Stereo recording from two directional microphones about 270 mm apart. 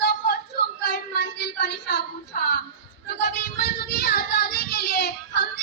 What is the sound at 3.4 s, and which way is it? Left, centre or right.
Child singing, left.